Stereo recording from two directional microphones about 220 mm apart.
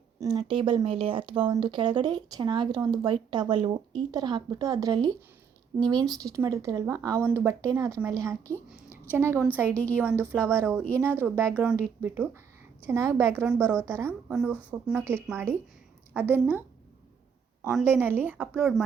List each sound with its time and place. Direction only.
0.3 s speech: 20° right (ahead or behind)
13.7 s speech: 5° left (ahead or behind)
14.3 s speech: 5° right (ahead or behind)
17.7 s speech: 5° right (ahead or behind)